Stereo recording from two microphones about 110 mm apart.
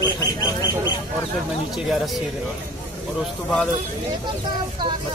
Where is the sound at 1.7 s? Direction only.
Centre (ahead or behind).